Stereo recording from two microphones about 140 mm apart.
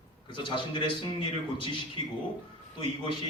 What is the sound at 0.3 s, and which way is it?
A man's voice, 35° left (ahead or behind).